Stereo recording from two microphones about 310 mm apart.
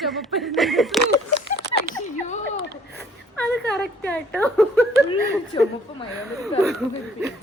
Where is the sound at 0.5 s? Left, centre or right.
Centre.